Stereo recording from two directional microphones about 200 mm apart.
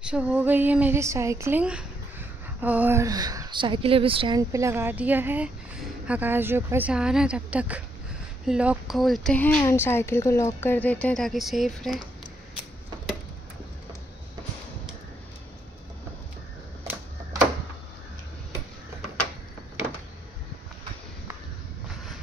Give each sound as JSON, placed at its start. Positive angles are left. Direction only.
{"t": 0.0, "sound": "speech", "side_deg": -5}